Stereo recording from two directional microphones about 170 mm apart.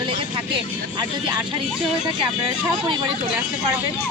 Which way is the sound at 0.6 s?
25° right (ahead or behind).